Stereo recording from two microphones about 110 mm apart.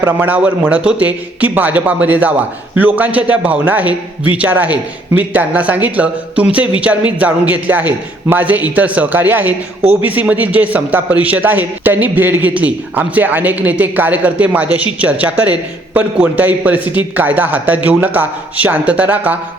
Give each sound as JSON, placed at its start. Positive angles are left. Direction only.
{"t": 0.0, "sound": "a man's voice", "side_deg": -15}